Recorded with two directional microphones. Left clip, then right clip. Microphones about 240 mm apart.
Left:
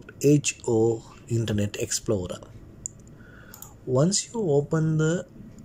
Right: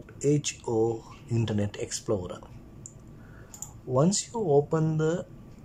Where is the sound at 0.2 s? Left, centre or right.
Centre.